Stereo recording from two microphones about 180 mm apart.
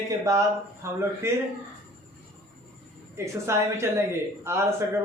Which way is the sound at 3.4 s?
15° right (ahead or behind).